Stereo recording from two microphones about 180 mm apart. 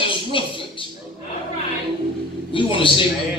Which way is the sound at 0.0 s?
30° left (ahead or behind).